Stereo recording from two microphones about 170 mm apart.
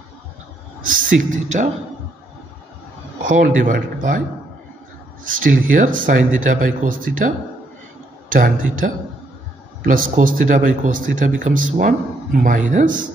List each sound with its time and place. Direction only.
0.8 s speech: 50° right (ahead or behind)
3.3 s speech: 50° right (ahead or behind)
5.2 s speech: 55° right (ahead or behind)
9.8 s speech: 50° right (ahead or behind)